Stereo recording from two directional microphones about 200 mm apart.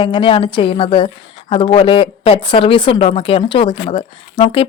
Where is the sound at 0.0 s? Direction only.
25° left (ahead or behind).